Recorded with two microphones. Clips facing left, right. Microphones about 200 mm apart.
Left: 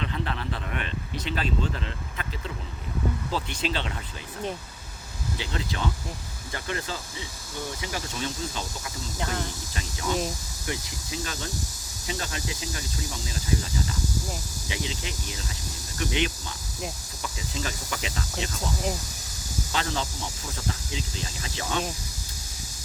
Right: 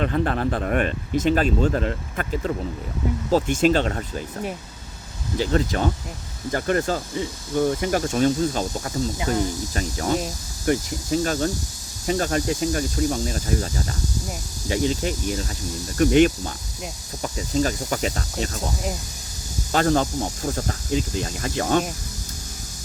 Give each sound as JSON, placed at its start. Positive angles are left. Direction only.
{"t": 0.0, "sound": "speech", "side_deg": -50}
{"t": 5.4, "sound": "speech", "side_deg": -45}
{"t": 9.1, "sound": "cricket", "side_deg": -10}
{"t": 9.7, "sound": "speech", "side_deg": -45}
{"t": 19.7, "sound": "speech", "side_deg": -50}